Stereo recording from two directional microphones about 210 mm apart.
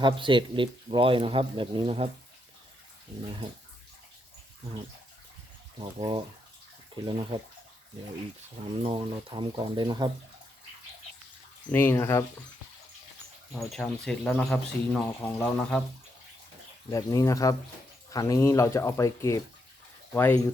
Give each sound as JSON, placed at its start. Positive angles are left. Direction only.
{"t": 0.0, "sound": "speech", "side_deg": -25}
{"t": 5.8, "sound": "speech", "side_deg": -25}
{"t": 8.7, "sound": "speech", "side_deg": -25}
{"t": 11.7, "sound": "speech", "side_deg": 10}
{"t": 13.6, "sound": "speech", "side_deg": 0}
{"t": 16.9, "sound": "speech", "side_deg": 15}